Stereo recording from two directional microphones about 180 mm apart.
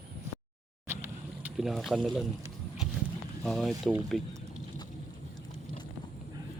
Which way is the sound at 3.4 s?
Centre (ahead or behind).